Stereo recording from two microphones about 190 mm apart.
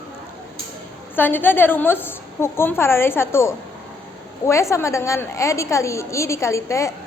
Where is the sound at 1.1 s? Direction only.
10° left (ahead or behind).